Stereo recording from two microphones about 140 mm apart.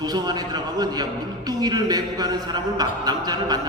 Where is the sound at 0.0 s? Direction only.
30° right (ahead or behind).